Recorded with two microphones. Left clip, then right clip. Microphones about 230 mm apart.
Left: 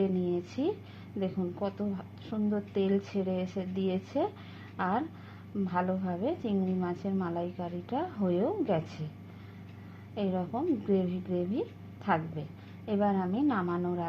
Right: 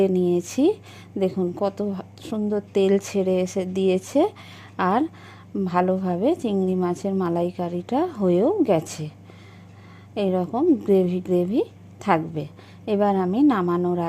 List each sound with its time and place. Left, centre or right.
0.0 s a woman's voice: right
10.2 s a woman's voice: right